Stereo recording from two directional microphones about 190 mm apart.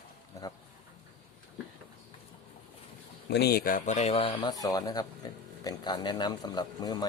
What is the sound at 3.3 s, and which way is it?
A man's voice, 60° left (ahead or behind).